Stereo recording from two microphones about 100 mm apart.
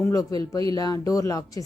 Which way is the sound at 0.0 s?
35° left (ahead or behind).